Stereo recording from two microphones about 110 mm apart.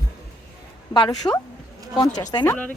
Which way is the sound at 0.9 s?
40° left (ahead or behind).